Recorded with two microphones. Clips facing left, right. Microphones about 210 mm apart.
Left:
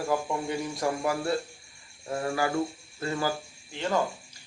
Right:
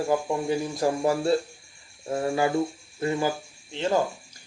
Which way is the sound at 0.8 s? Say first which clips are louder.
Right 4 dB; 25° right (ahead or behind).